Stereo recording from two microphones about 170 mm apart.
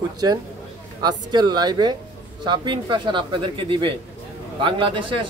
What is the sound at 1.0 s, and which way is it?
Speech, 25° right (ahead or behind).